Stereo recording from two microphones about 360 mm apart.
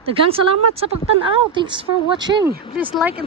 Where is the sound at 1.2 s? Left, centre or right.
Centre.